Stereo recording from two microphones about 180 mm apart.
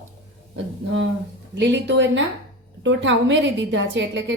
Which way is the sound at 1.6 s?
80° right.